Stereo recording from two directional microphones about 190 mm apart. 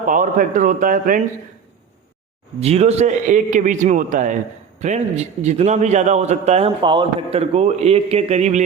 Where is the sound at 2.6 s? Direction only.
35° right (ahead or behind).